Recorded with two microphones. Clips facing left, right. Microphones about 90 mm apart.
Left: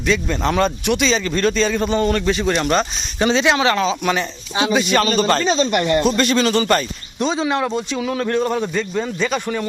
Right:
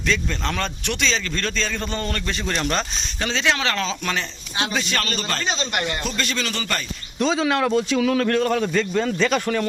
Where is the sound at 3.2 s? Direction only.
20° left (ahead or behind).